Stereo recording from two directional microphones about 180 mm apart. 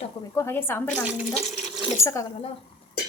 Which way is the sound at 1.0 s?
5° right (ahead or behind).